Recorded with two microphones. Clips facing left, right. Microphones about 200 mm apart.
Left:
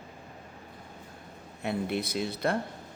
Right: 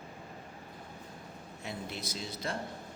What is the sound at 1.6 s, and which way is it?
Speech, 60° left (ahead or behind).